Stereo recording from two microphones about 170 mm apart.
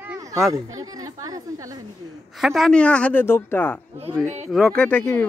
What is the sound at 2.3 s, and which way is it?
A woman's voice, centre (ahead or behind).